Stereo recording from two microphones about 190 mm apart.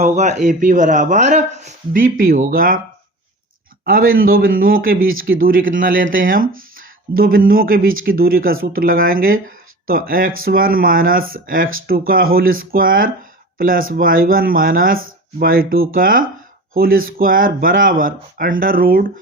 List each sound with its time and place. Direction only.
0.0 s speech: 35° right (ahead or behind)
3.8 s speech: 50° right (ahead or behind)
4.9 s speech: 90° right
5.2 s speech: 50° right (ahead or behind)